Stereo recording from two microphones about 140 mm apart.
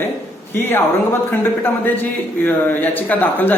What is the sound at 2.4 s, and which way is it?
Speech, 10° left (ahead or behind).